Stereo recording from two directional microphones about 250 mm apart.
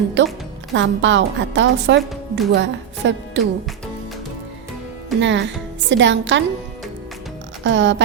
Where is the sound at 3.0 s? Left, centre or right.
Right.